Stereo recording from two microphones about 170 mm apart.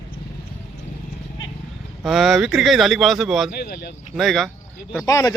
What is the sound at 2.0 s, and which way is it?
Speech, centre (ahead or behind).